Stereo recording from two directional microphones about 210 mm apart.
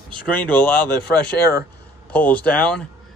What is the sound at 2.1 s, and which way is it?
Speech, 5° left (ahead or behind).